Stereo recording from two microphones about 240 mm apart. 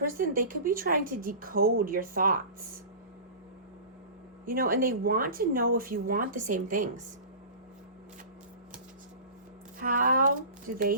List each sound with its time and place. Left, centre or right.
0.0 s a woman's voice: right
4.4 s a woman's voice: right
9.8 s a woman's voice: right